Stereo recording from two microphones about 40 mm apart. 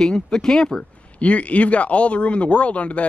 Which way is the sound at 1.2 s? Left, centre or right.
Left.